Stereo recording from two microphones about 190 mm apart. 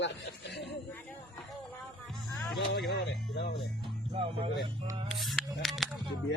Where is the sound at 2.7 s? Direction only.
60° left (ahead or behind).